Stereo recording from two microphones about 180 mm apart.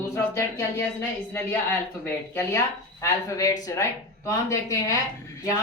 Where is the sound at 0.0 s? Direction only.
15° left (ahead or behind).